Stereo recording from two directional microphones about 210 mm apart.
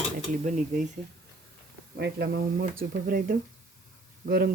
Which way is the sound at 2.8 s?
45° right (ahead or behind).